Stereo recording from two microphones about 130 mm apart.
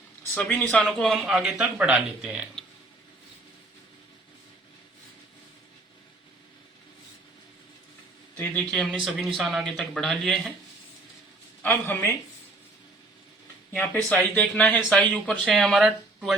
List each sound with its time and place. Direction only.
0.3 s speech: 10° left (ahead or behind); by 2.5 s 5° right (ahead or behind)
8.4 s speech: 10° left (ahead or behind)
11.6 s speech: 15° left (ahead or behind)
13.7 s speech: 15° left (ahead or behind); by 16.3 s 5° right (ahead or behind)